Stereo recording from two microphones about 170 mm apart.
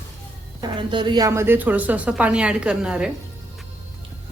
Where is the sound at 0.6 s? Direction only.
30° right (ahead or behind); by 3.1 s 5° right (ahead or behind).